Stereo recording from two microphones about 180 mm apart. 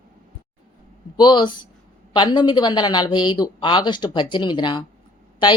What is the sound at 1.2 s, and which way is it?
Speech, 25° left (ahead or behind).